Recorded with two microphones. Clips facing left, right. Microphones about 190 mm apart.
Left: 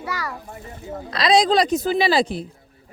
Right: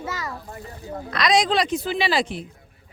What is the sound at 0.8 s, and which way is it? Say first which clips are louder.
Speech: left 2 dB; 30° left (ahead or behind).